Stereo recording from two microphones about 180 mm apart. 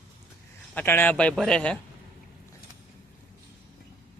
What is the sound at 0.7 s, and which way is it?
Speech, 10° left (ahead or behind).